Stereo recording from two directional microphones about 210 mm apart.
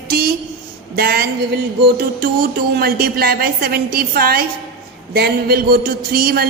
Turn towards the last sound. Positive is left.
turn(degrees=-45)  # may be behind; listen again after turning